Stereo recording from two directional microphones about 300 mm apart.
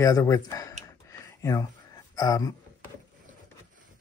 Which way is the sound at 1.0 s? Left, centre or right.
Centre.